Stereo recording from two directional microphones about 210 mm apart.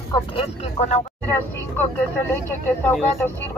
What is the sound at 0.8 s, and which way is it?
Speech, 30° left (ahead or behind).